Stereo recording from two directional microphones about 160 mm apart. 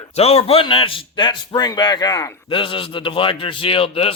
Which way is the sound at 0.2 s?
40° left (ahead or behind).